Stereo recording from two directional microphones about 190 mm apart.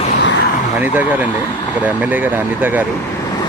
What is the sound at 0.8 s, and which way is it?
Speech, 10° right (ahead or behind).